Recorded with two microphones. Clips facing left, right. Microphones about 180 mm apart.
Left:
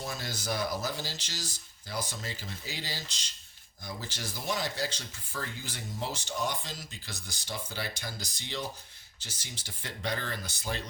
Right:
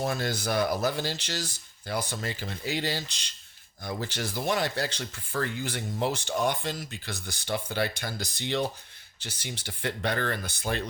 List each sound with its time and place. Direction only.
0.0 s speech: 60° right (ahead or behind)